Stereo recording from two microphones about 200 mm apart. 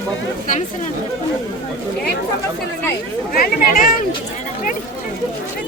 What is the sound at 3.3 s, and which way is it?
Speech, 45° left (ahead or behind).